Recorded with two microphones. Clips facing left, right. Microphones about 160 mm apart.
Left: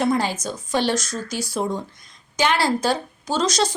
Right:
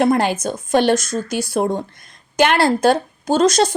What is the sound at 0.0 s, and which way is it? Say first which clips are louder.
Speech: right 5 dB; 60° right (ahead or behind).